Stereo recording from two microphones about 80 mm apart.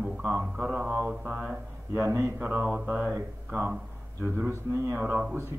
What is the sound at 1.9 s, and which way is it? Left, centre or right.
Speech, right.